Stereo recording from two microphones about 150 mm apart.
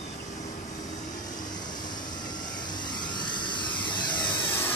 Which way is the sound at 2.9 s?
30° left (ahead or behind).